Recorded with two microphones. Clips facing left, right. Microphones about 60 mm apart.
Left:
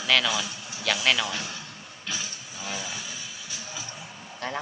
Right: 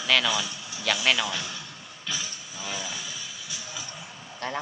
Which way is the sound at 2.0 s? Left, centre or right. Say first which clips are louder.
Even; left.